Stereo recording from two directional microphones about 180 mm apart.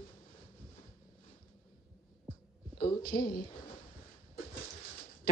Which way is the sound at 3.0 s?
55° left (ahead or behind).